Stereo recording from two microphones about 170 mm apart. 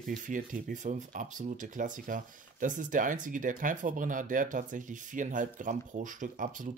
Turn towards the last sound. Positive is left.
turn(degrees=-50)  # may be behind; listen again after turning